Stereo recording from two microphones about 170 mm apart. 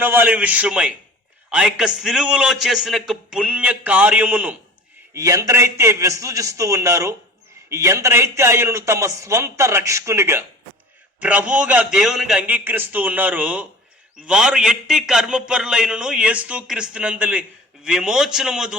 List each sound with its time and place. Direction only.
0.0 s a man's voice: 10° right (ahead or behind)